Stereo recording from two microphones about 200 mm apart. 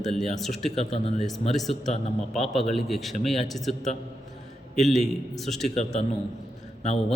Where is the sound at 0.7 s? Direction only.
35° left (ahead or behind).